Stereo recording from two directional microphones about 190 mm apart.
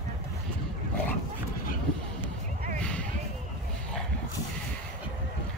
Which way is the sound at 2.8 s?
5° left (ahead or behind).